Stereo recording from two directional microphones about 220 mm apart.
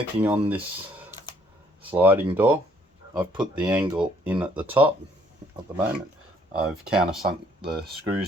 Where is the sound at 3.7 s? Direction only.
15° right (ahead or behind).